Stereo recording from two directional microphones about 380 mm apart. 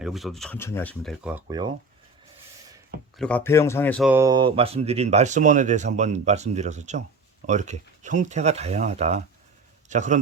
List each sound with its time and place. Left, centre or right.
0.0 s speech: centre
3.2 s a man's voice: centre